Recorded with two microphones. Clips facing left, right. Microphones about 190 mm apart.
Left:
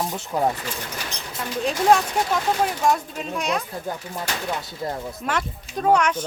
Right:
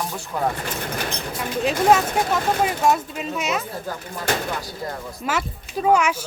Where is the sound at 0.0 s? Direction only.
20° left (ahead or behind).